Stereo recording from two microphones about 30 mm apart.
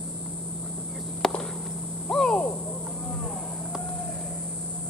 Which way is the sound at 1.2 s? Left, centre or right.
Left.